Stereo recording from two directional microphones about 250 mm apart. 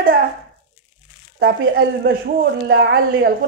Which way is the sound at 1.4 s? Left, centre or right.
Right.